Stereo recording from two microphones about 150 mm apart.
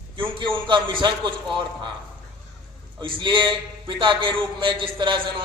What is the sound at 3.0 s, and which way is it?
A man's voice, 35° right (ahead or behind).